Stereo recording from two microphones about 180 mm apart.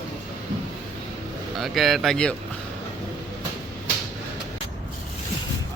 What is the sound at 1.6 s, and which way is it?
Speech, centre (ahead or behind).